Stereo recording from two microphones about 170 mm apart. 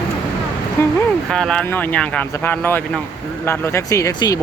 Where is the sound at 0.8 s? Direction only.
15° left (ahead or behind).